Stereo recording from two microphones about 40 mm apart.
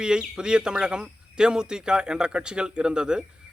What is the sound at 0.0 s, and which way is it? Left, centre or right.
A man's voice, centre.